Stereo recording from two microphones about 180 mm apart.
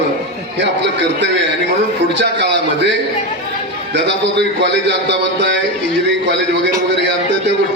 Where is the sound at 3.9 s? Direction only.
70° right (ahead or behind).